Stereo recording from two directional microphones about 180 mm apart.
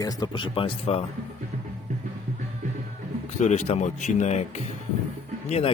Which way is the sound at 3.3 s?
40° left (ahead or behind).